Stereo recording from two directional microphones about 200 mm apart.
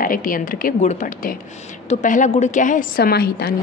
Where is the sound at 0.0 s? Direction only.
45° left (ahead or behind).